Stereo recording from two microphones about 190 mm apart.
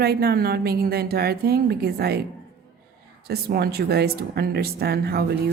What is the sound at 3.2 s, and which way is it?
A woman's voice, 55° right (ahead or behind).